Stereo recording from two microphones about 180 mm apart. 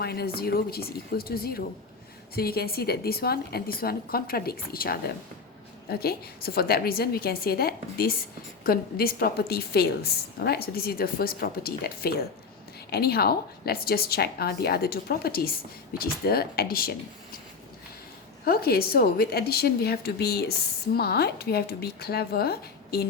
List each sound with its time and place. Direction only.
0.0 s a woman's voice: 60° left (ahead or behind)
18.4 s a woman's voice: 55° left (ahead or behind)